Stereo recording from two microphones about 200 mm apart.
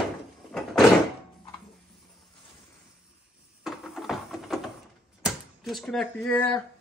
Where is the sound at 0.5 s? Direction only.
Centre (ahead or behind).